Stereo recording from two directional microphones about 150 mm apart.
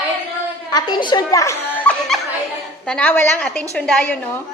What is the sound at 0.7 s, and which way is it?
Snicker, 30° left (ahead or behind).